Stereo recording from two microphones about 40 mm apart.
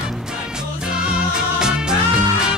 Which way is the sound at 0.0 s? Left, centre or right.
Centre.